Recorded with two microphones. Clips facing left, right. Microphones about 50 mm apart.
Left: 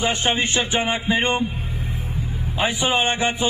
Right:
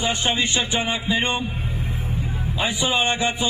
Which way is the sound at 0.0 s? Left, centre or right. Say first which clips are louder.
Left 1 dB; left.